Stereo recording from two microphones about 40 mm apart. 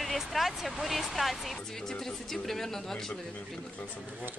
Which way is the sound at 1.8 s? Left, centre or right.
Centre.